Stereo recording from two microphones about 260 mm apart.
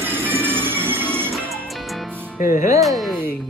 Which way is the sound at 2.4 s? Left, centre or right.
Left.